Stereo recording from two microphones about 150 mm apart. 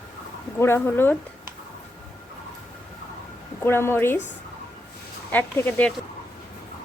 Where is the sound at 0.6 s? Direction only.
15° left (ahead or behind).